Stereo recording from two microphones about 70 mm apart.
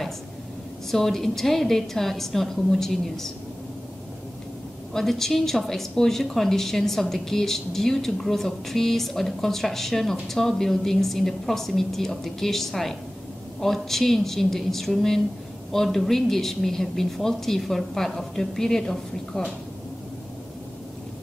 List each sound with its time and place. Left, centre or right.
0.9 s a woman's voice: centre
4.9 s a woman's voice: centre